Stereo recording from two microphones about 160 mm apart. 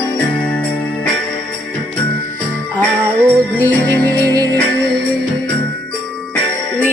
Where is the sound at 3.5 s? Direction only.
10° left (ahead or behind).